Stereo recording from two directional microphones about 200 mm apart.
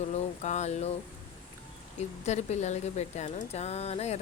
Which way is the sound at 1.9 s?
35° left (ahead or behind).